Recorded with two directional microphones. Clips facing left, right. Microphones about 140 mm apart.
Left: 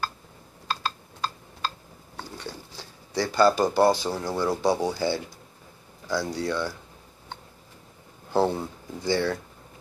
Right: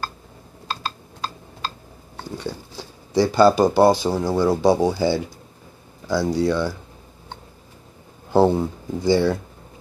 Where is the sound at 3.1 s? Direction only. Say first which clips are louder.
Right 9 dB; 25° right (ahead or behind).